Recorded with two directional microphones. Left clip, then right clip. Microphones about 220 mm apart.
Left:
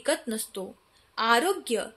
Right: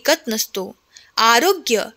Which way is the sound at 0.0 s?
40° right (ahead or behind).